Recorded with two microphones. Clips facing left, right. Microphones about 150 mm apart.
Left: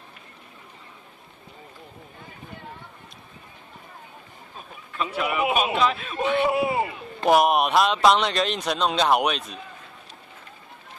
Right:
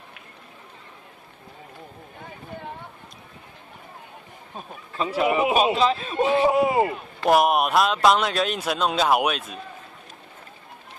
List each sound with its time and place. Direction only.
4.9 s a man's voice: 30° right (ahead or behind)
7.2 s speech: centre (ahead or behind)